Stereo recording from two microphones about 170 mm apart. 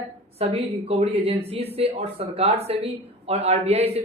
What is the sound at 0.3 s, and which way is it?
A woman's voice, 35° right (ahead or behind).